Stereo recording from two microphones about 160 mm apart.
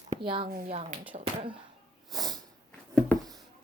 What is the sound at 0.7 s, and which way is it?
Speech, 40° right (ahead or behind).